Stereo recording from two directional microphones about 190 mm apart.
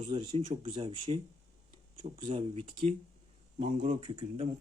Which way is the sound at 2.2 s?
30° right (ahead or behind).